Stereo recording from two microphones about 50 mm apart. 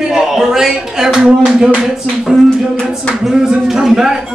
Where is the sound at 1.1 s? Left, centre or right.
Centre.